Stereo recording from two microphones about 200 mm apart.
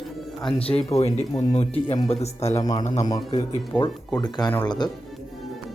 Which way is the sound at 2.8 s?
35° left (ahead or behind).